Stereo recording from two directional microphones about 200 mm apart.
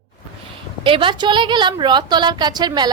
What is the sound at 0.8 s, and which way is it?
A woman's voice, 25° right (ahead or behind).